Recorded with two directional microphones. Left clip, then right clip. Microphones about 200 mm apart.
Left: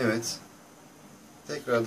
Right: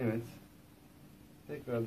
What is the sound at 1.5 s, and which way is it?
Speech, 15° left (ahead or behind).